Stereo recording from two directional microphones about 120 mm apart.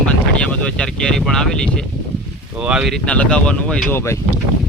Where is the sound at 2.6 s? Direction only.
5° right (ahead or behind).